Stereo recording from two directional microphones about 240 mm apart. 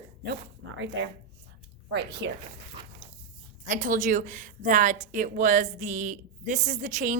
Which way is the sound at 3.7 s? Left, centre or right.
Right.